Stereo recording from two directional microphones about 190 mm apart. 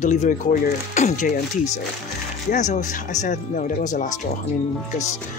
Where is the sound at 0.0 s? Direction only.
40° left (ahead or behind).